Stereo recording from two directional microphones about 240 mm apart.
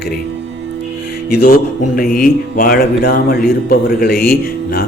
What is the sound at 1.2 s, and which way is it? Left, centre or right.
Speech, left.